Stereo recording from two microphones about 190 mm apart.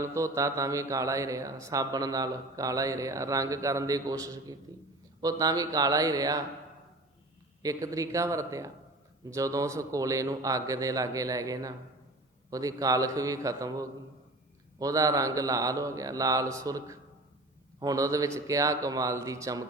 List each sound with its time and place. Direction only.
0.0 s a man's voice: 15° right (ahead or behind)
7.6 s a man's voice: 20° right (ahead or behind)